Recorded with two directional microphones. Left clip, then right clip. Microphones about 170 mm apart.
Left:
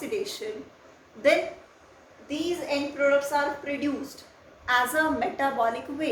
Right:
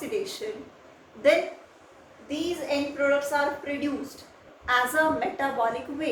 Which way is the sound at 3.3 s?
30° left (ahead or behind).